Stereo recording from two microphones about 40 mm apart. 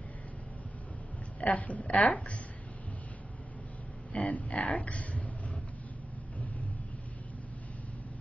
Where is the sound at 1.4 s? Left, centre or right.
Left.